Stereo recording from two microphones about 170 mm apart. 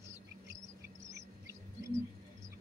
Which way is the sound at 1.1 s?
15° right (ahead or behind).